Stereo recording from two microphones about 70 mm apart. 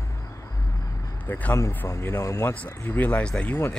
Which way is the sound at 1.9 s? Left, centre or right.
Left.